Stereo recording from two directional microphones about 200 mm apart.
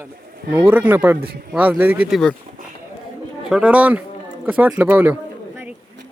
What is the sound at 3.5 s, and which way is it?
Speech, 5° right (ahead or behind).